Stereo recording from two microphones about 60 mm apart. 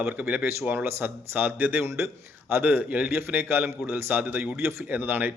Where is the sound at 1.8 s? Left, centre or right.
Right.